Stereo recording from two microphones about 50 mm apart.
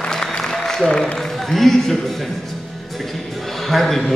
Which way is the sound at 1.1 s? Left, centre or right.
Centre.